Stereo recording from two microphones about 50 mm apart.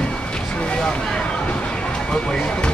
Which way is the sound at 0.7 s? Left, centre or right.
Centre.